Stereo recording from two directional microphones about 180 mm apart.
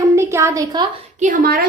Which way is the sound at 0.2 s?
15° right (ahead or behind).